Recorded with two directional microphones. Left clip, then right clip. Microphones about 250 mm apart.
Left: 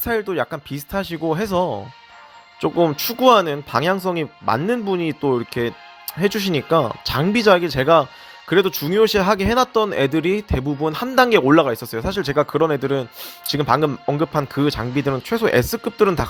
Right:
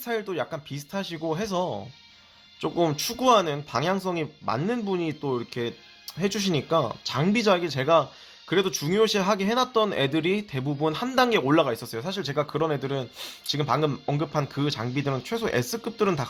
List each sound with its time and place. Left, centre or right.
0.0 s a man's voice: left